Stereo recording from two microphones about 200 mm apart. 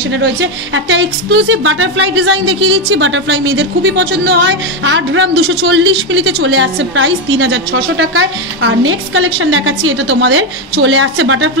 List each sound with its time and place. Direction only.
0.2 s a woman's voice: 65° right (ahead or behind)